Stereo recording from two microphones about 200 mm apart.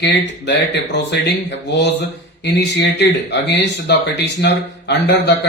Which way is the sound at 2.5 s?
55° left (ahead or behind).